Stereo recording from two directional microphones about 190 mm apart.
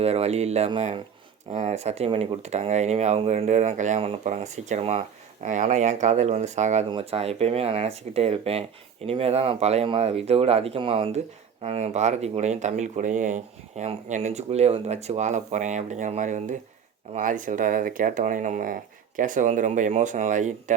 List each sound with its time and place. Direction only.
0.0 s speech: 35° right (ahead or behind)